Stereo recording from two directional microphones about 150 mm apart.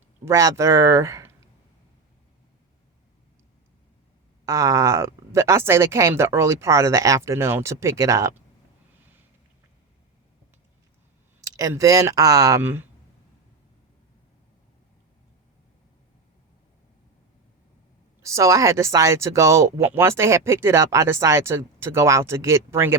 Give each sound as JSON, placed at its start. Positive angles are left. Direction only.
{"t": 0.3, "sound": "speech", "side_deg": -20}
{"t": 4.4, "sound": "speech", "side_deg": -20}
{"t": 11.3, "sound": "speech", "side_deg": -25}
{"t": 18.2, "sound": "speech", "side_deg": -20}